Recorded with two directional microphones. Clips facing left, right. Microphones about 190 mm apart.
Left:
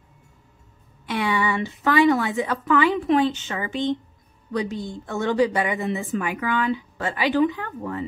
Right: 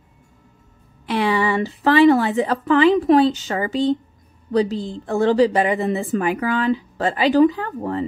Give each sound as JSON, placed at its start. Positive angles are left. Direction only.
{"t": 1.0, "sound": "a woman's voice", "side_deg": -30}